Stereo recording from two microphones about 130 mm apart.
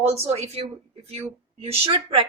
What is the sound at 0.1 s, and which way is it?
A woman's voice, 55° right (ahead or behind).